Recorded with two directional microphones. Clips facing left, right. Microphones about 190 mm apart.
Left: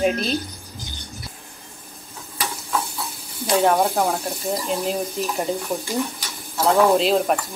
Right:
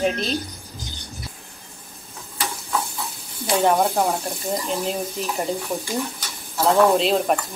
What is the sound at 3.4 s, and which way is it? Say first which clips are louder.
A woman's voice: left 1 dB; centre (ahead or behind).